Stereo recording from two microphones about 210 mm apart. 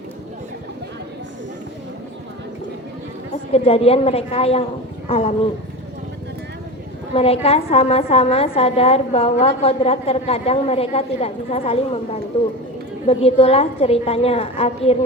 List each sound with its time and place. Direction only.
3.5 s a woman's voice: 30° left (ahead or behind)
7.1 s a woman's voice: 30° left (ahead or behind)